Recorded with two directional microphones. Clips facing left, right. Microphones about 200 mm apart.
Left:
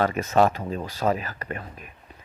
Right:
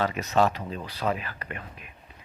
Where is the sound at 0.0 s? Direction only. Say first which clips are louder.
Left 3 dB; 50° left (ahead or behind).